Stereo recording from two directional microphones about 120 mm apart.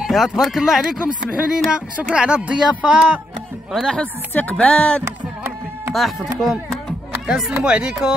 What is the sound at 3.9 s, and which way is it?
Music, 10° left (ahead or behind).